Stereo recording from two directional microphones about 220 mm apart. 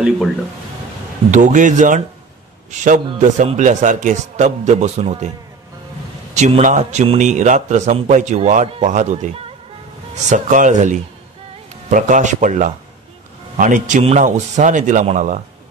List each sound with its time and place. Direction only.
1.3 s a man's voice: 35° right (ahead or behind)
3.1 s a man's voice: 30° right (ahead or behind)
6.3 s a man's voice: 30° right (ahead or behind)
10.3 s a man's voice: 35° right (ahead or behind)